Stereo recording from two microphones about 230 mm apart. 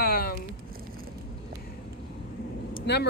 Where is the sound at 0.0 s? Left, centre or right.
Left.